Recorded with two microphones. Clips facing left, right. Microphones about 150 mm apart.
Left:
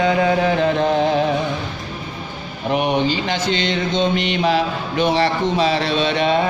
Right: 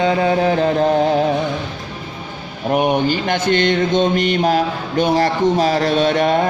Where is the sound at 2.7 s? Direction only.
50° right (ahead or behind).